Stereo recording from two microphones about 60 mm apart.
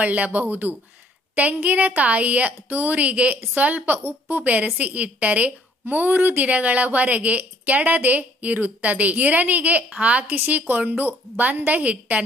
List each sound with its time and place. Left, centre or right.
0.0 s a woman's voice: right